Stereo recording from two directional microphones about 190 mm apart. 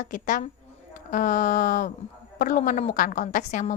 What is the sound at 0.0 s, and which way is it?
A woman's voice, 45° left (ahead or behind).